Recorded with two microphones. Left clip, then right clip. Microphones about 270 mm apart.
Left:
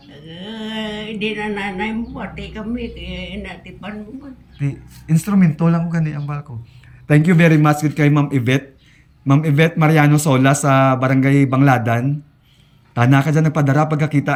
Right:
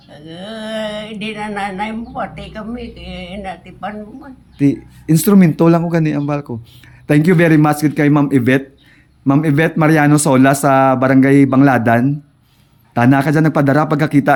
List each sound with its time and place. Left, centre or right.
0.3 s a man's voice: centre
3.0 s a sound: right
3.2 s a man's voice: centre
4.5 s a man's voice: right